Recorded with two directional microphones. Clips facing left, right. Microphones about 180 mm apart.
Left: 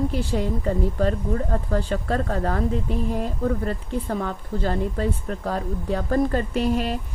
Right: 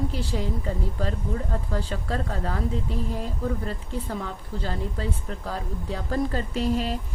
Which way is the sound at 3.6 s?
55° left (ahead or behind).